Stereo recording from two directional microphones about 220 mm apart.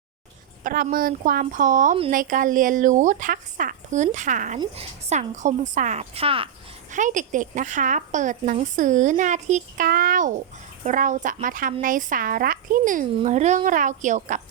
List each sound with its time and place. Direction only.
0.6 s a woman's voice: 40° right (ahead or behind)
6.9 s a woman's voice: 35° right (ahead or behind)